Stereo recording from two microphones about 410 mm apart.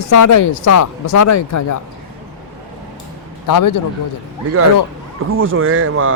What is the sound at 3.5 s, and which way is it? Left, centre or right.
Speech, left.